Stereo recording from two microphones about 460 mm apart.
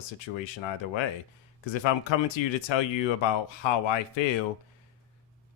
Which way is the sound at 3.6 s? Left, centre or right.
Left.